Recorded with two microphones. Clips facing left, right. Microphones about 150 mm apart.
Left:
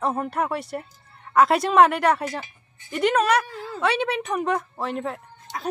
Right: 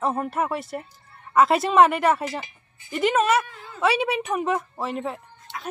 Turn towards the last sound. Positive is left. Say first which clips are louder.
# left 3 dB
turn(degrees=40)  # may be behind; listen again after turning